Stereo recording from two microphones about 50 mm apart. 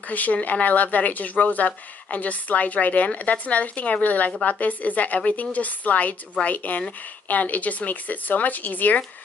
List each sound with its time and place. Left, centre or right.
0.1 s speech: left